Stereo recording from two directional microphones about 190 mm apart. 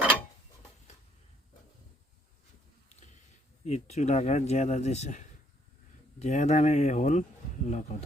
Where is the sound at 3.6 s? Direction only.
35° left (ahead or behind).